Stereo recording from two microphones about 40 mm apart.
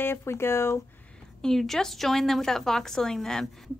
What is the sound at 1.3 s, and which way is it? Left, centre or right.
A woman's voice, centre.